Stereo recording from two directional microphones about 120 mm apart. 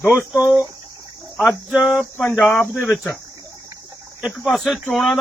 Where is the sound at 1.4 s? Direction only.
Centre (ahead or behind).